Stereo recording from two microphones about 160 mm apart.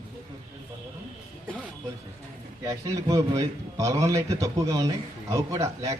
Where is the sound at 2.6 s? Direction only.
20° right (ahead or behind).